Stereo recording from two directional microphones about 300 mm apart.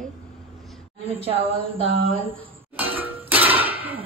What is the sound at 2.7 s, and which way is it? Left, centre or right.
Clang, centre.